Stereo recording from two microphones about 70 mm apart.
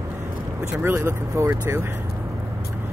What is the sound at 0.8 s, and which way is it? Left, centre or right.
Speech, right.